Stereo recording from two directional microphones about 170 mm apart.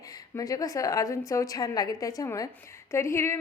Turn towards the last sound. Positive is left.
turn(degrees=15)  # may be behind; listen again after turning